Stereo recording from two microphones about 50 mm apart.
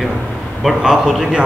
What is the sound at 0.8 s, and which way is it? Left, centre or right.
Speech, centre.